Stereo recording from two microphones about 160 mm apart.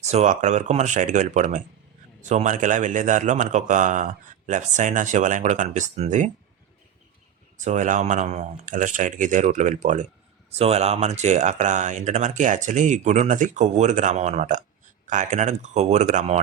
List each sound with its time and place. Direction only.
0.0 s speech: 45° right (ahead or behind)
7.6 s speech: 50° right (ahead or behind)